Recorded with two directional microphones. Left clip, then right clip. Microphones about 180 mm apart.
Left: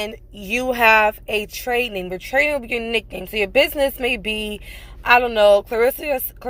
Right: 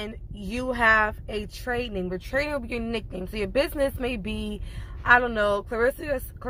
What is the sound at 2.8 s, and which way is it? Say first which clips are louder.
Speech: left 8 dB; 5° left (ahead or behind).